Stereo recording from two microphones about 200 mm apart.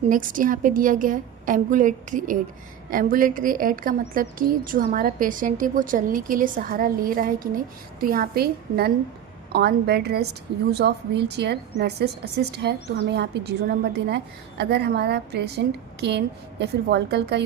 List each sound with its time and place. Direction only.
0.1 s a woman's voice: 40° right (ahead or behind); by 17.4 s 55° right (ahead or behind)